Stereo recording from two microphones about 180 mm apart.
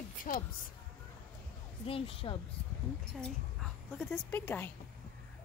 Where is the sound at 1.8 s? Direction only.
30° left (ahead or behind).